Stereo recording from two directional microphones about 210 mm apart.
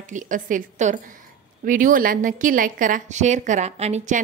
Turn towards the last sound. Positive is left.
turn(degrees=-30)  # may be behind; listen again after turning